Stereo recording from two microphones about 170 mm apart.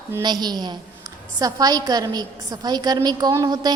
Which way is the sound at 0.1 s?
25° right (ahead or behind).